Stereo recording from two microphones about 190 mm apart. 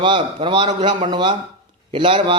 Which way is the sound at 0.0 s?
25° right (ahead or behind).